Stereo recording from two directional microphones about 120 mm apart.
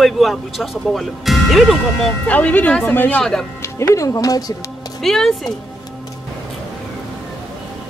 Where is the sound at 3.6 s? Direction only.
25° left (ahead or behind).